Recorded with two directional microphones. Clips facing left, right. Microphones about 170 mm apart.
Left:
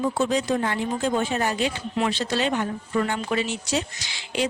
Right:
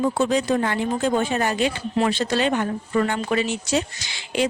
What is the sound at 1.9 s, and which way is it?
Speech, 45° right (ahead or behind).